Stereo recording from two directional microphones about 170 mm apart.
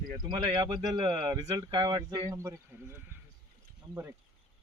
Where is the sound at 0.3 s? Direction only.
25° right (ahead or behind).